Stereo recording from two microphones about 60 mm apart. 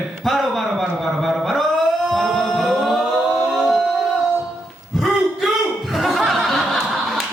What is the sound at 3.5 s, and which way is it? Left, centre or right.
Music, centre.